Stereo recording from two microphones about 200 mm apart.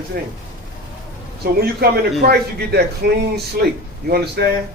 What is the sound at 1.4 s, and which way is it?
A man's voice, 50° right (ahead or behind).